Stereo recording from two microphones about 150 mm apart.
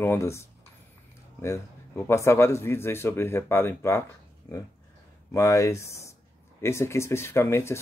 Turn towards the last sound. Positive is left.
turn(degrees=15)  # may be behind; listen again after turning